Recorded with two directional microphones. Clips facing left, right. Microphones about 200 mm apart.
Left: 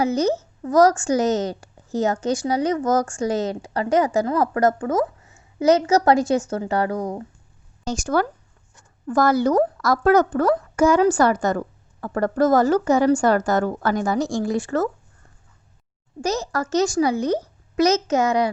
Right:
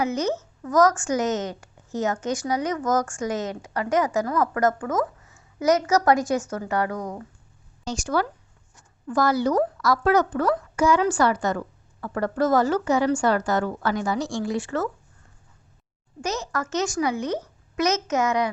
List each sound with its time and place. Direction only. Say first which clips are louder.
0.0 s a woman's voice: left 4 dB; 35° left (ahead or behind)
7.9 s speech: left 3 dB; 45° left (ahead or behind)
16.2 s a woman's voice: left 4 dB; 35° left (ahead or behind)